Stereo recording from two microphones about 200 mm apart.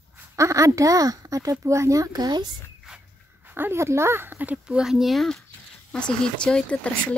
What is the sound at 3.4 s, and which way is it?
Speech, 10° right (ahead or behind).